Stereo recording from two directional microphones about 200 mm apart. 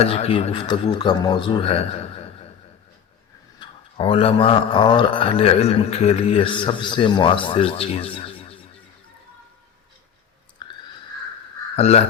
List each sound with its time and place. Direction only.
0.0 s speech: 30° left (ahead or behind)
3.6 s speech: 25° left (ahead or behind)
10.6 s a sound: 25° left (ahead or behind)
11.8 s speech: 30° left (ahead or behind)